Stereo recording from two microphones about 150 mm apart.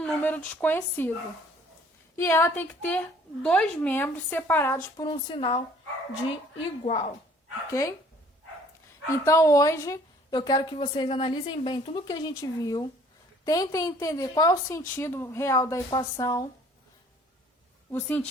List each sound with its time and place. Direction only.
0.0 s speech: 10° left (ahead or behind)
2.1 s a woman's voice: 15° left (ahead or behind)
4.9 s a woman's voice: 35° left (ahead or behind)
7.7 s a woman's voice: 20° left (ahead or behind)
9.2 s a woman's voice: 20° left (ahead or behind)